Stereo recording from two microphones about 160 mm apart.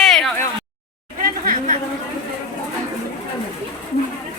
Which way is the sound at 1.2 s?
60° right (ahead or behind).